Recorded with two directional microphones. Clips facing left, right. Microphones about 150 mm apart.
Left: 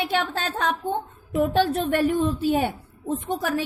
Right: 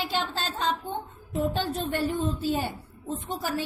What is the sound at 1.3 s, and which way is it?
A woman's voice, 70° left (ahead or behind).